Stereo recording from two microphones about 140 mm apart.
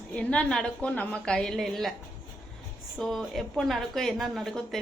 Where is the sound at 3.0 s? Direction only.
Centre (ahead or behind).